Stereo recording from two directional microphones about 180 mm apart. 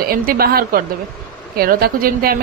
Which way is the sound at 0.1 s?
55° right (ahead or behind).